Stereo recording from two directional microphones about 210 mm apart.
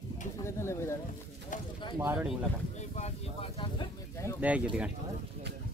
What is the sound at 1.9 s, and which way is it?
Speech, 10° right (ahead or behind).